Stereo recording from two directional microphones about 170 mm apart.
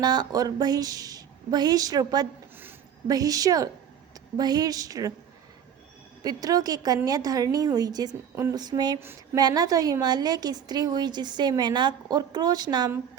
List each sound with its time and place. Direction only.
0.0 s a woman's voice: 25° right (ahead or behind)
6.2 s a woman's voice: 20° right (ahead or behind)